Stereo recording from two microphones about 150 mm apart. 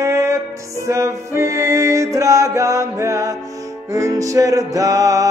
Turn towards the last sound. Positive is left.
turn(degrees=-20)  # may be behind; listen again after turning